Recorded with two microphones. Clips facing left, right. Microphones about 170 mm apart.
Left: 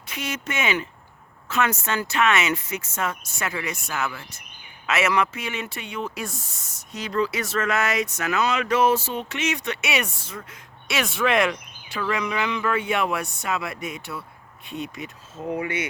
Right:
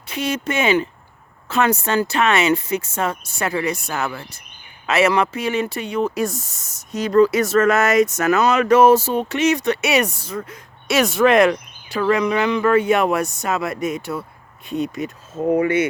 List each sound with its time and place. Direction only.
0.1 s speech: 30° right (ahead or behind); by 15.9 s 50° right (ahead or behind)